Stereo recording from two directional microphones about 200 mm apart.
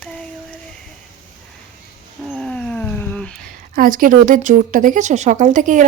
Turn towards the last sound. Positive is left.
turn(degrees=-40)  # may be behind; listen again after turning